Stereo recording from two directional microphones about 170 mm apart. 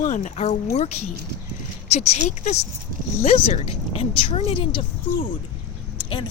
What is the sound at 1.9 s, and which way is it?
Speech, 40° left (ahead or behind).